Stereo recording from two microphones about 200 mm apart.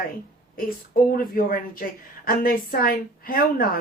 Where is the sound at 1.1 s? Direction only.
45° left (ahead or behind).